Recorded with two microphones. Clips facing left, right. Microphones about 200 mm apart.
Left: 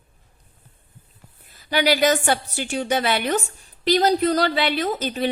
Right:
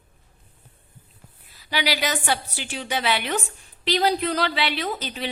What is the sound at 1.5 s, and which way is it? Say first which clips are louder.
A woman's voice: left 6 dB; 50° left (ahead or behind).